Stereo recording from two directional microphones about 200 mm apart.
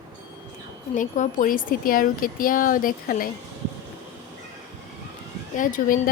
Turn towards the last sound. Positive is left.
turn(degrees=40)  # may be behind; listen again after turning